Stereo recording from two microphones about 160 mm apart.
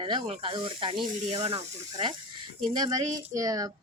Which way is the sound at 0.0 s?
35° right (ahead or behind).